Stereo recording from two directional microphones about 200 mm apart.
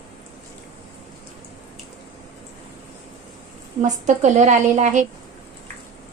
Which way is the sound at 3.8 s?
35° right (ahead or behind).